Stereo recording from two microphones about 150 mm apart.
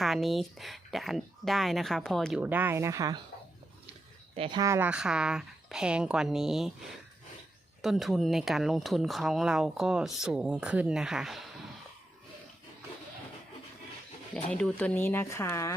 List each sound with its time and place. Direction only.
0.0 s speech: centre (ahead or behind)
2.4 s speech: 10° right (ahead or behind)
4.4 s speech: 30° right (ahead or behind)
4.6 s speech: 20° right (ahead or behind)
4.9 s speech: 5° right (ahead or behind)
14.3 s speech: 10° left (ahead or behind)